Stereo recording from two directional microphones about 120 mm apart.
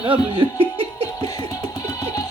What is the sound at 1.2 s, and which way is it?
Music, 30° left (ahead or behind).